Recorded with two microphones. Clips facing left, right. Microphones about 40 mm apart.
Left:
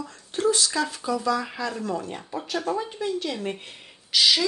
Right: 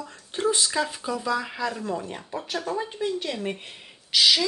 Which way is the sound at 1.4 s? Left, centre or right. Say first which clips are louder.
Right 1 dB; centre.